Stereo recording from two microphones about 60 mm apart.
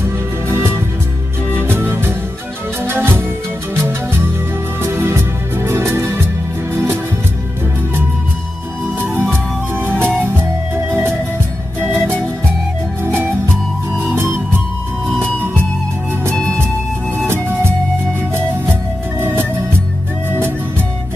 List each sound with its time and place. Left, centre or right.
0.0 s music: right
1.6 s music: right
9.1 s music: right
13.0 s music: right
20.2 s music: right